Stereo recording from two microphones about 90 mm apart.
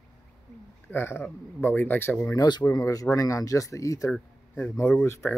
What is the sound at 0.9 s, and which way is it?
Speech, 25° left (ahead or behind).